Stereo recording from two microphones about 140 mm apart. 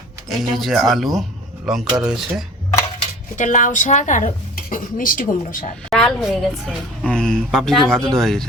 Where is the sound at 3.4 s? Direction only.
65° left (ahead or behind).